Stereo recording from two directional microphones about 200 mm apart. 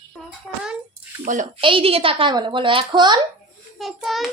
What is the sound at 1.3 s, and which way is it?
Speech, 40° right (ahead or behind).